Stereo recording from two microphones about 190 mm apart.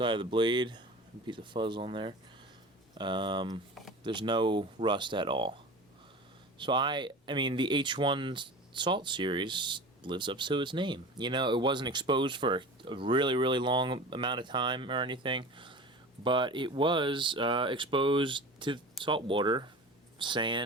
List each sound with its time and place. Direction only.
0.0 s speech: 25° right (ahead or behind)
6.6 s speech: 25° right (ahead or behind)